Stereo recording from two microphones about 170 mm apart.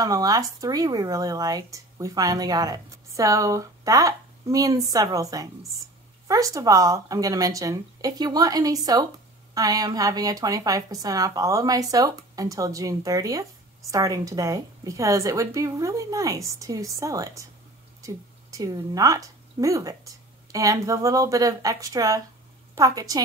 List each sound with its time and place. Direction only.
0.0 s a woman's voice: 20° right (ahead or behind)